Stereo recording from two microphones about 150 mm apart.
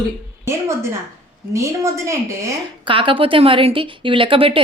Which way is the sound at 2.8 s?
35° right (ahead or behind).